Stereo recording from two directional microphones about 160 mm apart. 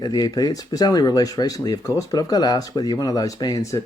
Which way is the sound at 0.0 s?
25° left (ahead or behind).